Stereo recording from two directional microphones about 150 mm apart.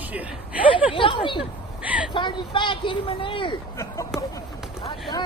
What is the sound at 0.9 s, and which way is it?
Speech, 35° left (ahead or behind).